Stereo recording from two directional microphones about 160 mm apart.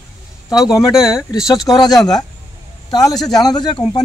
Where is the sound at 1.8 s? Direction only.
25° left (ahead or behind).